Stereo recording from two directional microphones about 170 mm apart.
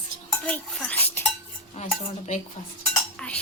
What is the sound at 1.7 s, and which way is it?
Dishes, 45° left (ahead or behind).